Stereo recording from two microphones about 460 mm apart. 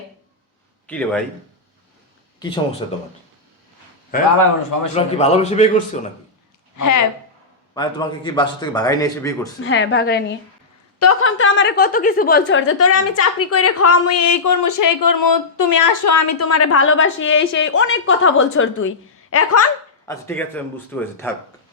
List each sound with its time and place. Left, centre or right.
0.9 s a man's voice: centre
2.8 s a man's voice: centre
4.9 s a man's voice: centre
6.7 s a woman's voice: left
7.7 s a man's voice: centre
9.6 s a woman's voice: left
20.1 s a man's voice: centre